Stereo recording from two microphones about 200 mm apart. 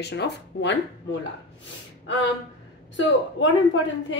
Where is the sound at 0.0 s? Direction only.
60° left (ahead or behind).